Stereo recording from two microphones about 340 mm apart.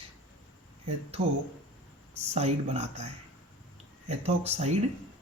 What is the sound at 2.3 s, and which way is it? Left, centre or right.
Speech, centre.